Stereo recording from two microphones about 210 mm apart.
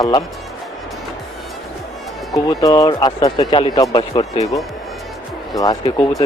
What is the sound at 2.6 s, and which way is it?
Speech, 15° left (ahead or behind).